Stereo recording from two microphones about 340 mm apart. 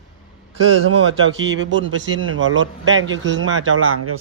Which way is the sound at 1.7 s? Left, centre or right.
Right.